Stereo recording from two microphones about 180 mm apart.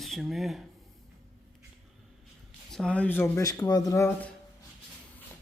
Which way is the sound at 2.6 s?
5° left (ahead or behind).